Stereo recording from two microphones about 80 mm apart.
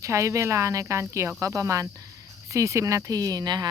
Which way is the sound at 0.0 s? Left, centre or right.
Right.